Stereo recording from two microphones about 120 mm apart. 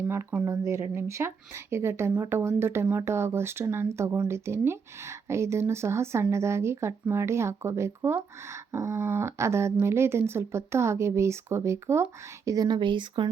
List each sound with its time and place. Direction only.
0.0 s speech: 20° right (ahead or behind)
12.5 s speech: 35° right (ahead or behind)